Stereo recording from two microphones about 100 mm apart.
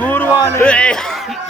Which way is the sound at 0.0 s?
20° left (ahead or behind).